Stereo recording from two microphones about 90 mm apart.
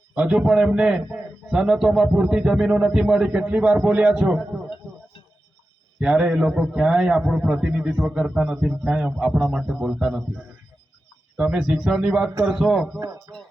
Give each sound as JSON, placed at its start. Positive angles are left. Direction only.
{"t": 0.1, "sound": "a man's voice", "side_deg": -15}
{"t": 6.0, "sound": "a man's voice", "side_deg": -10}
{"t": 13.0, "sound": "speech", "side_deg": -40}